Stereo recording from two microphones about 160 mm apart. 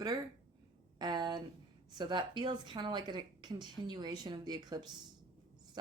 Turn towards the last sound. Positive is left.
turn(degrees=-25)  # may be behind; listen again after turning